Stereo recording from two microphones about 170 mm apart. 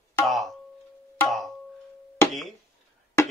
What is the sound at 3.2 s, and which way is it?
Music, 15° left (ahead or behind).